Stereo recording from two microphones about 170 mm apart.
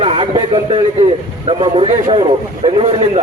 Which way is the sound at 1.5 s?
35° right (ahead or behind).